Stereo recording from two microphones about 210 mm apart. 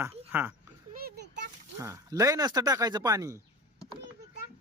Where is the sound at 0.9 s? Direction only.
45° right (ahead or behind).